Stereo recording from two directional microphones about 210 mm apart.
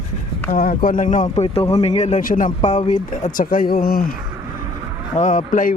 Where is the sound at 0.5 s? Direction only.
45° left (ahead or behind).